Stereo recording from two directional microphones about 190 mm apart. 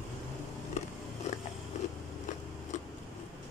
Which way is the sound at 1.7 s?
40° left (ahead or behind).